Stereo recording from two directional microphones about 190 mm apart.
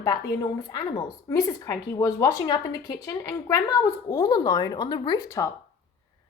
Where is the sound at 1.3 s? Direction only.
20° left (ahead or behind).